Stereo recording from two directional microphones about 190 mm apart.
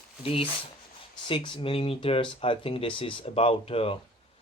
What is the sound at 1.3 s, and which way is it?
Speech, 25° left (ahead or behind).